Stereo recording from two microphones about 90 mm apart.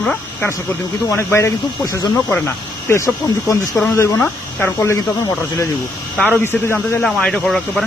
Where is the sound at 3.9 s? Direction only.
35° left (ahead or behind).